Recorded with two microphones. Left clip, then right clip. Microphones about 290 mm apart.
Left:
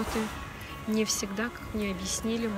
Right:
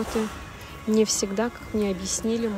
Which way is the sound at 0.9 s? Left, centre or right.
Centre.